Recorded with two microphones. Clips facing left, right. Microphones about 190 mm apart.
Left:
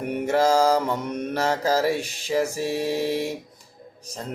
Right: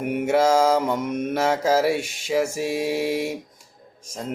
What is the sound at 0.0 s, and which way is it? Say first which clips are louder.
Mantra: right 2 dB; 5° right (ahead or behind).